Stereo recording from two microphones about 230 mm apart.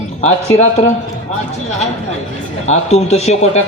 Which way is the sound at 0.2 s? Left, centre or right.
Left.